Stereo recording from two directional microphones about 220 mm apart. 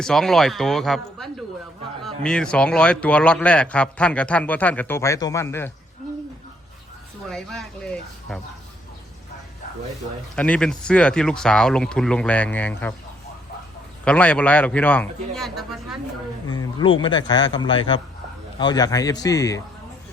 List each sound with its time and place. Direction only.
0.0 s speech: centre (ahead or behind)
7.3 s speech: centre (ahead or behind)
10.3 s speech: 5° left (ahead or behind)
14.0 s speech: 5° left (ahead or behind)
16.5 s a man's voice: 20° left (ahead or behind)